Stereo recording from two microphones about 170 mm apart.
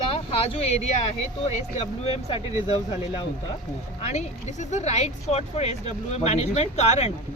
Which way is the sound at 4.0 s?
40° left (ahead or behind).